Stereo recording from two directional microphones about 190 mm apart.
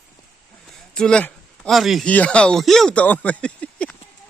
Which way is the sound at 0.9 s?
5° left (ahead or behind).